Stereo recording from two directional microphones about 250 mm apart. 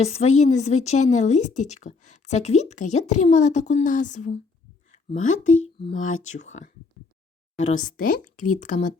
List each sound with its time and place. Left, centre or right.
0.0 s a woman's voice: left
4.9 s a sound: left
5.6 s a woman's voice: left
7.9 s a woman's voice: left